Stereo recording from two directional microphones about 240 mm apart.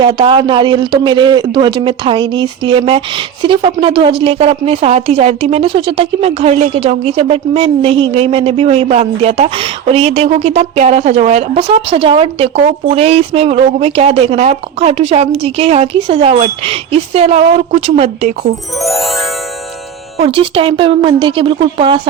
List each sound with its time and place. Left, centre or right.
0.0 s a woman's voice: right
18.8 s music: centre
20.2 s a woman's voice: right